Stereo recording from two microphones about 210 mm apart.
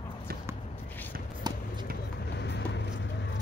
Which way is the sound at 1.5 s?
20° right (ahead or behind).